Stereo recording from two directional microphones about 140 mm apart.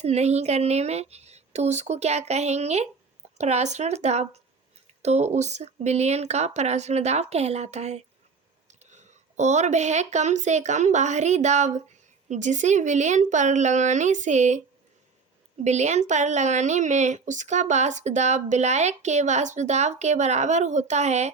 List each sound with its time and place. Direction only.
0.0 s speech: 50° right (ahead or behind)
15.6 s speech: 55° right (ahead or behind)